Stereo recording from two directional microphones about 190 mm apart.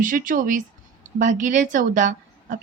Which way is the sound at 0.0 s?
45° right (ahead or behind).